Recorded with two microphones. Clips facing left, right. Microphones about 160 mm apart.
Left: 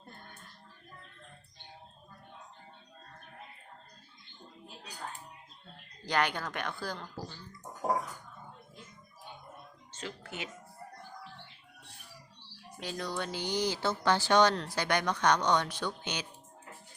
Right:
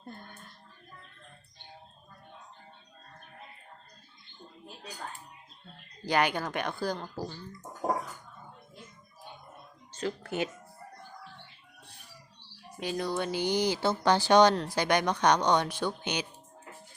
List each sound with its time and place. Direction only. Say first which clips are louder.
6.1 s speech: right 4 dB; 10° right (ahead or behind)
9.9 s speech: right 9 dB; 40° right (ahead or behind)
12.8 s speech: right 5 dB; 15° right (ahead or behind)